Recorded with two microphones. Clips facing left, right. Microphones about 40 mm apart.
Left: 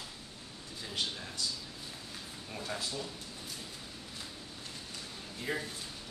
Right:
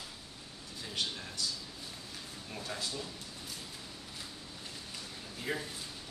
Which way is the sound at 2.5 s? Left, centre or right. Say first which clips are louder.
Left 1 dB; centre.